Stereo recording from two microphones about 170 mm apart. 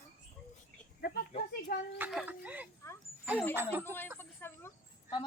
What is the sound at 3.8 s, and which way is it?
Speech, 10° left (ahead or behind).